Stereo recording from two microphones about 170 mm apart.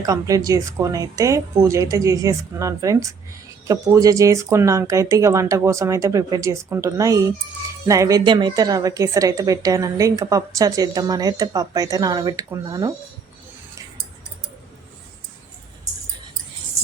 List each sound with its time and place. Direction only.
0.0 s a woman's voice: 20° right (ahead or behind)